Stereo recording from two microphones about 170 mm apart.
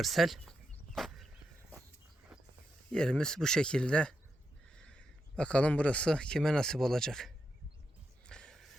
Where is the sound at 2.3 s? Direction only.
5° right (ahead or behind).